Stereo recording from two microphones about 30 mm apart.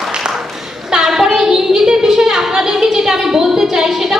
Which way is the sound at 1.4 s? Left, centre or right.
Centre.